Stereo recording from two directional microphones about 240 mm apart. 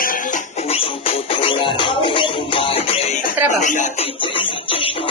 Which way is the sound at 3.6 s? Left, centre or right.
Left.